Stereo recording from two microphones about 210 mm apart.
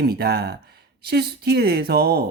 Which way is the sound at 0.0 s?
50° right (ahead or behind).